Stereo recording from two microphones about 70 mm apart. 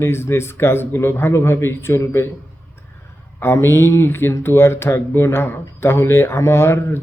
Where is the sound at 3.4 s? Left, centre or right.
Left.